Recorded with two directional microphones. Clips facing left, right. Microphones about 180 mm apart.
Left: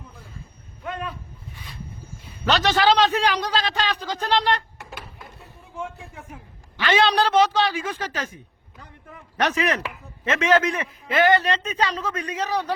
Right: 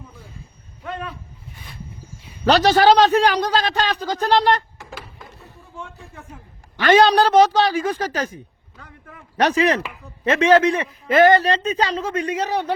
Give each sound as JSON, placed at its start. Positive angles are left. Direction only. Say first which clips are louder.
{"t": 2.4, "sound": "a man's voice", "louder": "right 6 dB", "side_deg": -35}
{"t": 6.7, "sound": "a woman's voice", "louder": "right 6 dB", "side_deg": -45}
{"t": 9.4, "sound": "a woman's voice", "louder": "right 5 dB", "side_deg": -30}
{"t": 11.1, "sound": "a woman's voice", "louder": "right 5 dB", "side_deg": -40}